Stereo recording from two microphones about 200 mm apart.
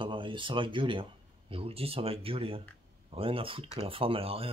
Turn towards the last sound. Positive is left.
turn(degrees=-30)  # may be behind; listen again after turning